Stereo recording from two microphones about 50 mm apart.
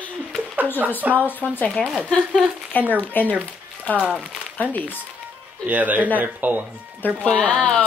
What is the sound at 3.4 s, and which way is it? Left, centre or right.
Music, left.